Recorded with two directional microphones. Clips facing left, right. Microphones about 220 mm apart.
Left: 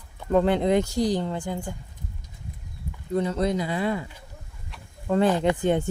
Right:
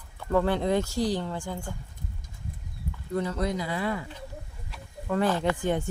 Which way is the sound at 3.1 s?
20° left (ahead or behind).